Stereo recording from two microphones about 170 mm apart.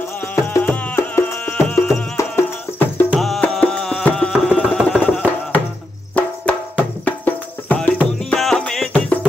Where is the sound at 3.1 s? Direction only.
Centre (ahead or behind).